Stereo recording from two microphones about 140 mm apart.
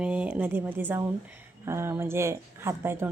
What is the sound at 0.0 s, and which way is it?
Speech, 10° right (ahead or behind).